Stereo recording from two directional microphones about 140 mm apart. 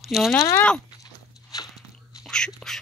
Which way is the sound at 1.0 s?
25° left (ahead or behind).